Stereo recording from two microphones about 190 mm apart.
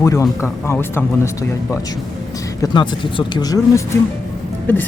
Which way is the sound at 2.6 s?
25° left (ahead or behind).